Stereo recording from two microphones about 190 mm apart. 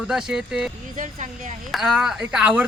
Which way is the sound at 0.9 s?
40° right (ahead or behind).